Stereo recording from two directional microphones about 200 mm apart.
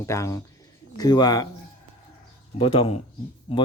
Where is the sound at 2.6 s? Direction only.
30° left (ahead or behind).